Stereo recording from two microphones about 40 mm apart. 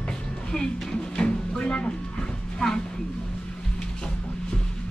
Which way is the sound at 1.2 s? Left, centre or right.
Left.